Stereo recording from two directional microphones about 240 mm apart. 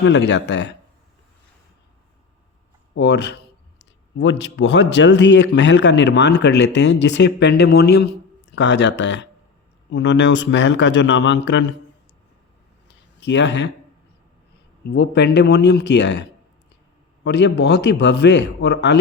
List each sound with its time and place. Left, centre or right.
0.0 s a man's voice: left
2.9 s a man's voice: left
13.1 s speech: left
14.8 s a man's voice: left
17.2 s a man's voice: left